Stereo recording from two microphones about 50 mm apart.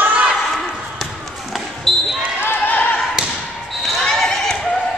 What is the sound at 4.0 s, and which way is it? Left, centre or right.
Neigh, centre.